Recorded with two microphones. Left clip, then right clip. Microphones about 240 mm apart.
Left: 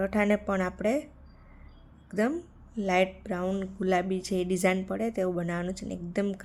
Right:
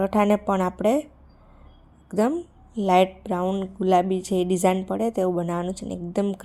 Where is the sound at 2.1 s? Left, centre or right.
Centre.